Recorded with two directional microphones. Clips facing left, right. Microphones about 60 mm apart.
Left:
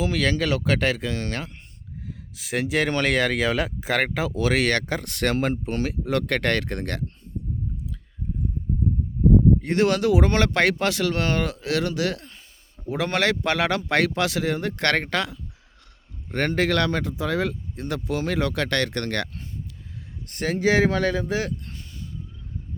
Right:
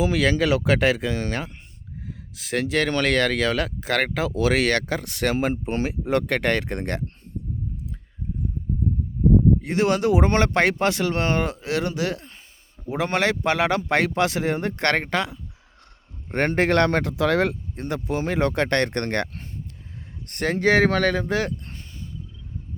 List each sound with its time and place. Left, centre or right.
0.0 s speech: centre
5.6 s speech: right
9.6 s speech: centre
9.8 s speech: right
16.3 s speech: right
17.7 s speech: right
20.2 s speech: right
21.7 s a sound: right